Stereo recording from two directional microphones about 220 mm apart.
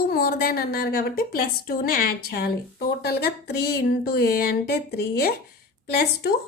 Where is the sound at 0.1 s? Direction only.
45° left (ahead or behind).